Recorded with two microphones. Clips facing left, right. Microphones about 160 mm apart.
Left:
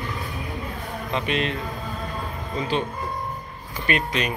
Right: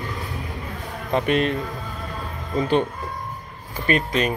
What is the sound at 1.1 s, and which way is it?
Speech, 45° right (ahead or behind).